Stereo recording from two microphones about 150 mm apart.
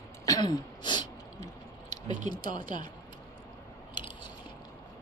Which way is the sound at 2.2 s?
30° left (ahead or behind).